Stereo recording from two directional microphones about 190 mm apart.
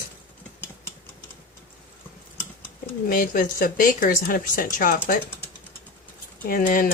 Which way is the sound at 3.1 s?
45° left (ahead or behind).